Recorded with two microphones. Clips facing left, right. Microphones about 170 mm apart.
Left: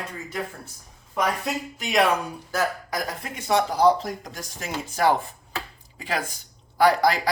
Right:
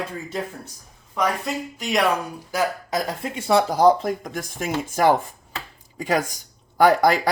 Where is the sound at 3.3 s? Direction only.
30° right (ahead or behind).